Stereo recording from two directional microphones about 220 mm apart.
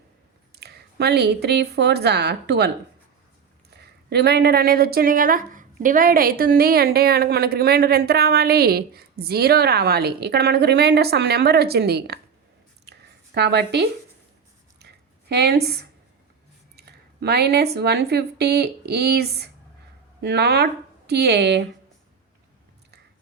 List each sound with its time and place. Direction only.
0.5 s a woman's voice: 45° right (ahead or behind)
12.9 s a sound: 50° right (ahead or behind)
13.3 s a woman's voice: 50° right (ahead or behind)
15.3 s a woman's voice: 45° right (ahead or behind)